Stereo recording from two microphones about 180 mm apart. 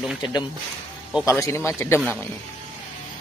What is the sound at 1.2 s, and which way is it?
Speech, 15° left (ahead or behind).